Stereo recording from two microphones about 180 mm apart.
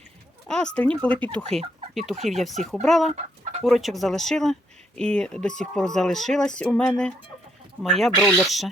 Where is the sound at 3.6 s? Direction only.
Centre (ahead or behind).